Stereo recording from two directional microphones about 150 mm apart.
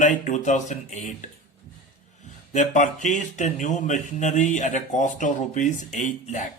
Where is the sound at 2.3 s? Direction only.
55° left (ahead or behind).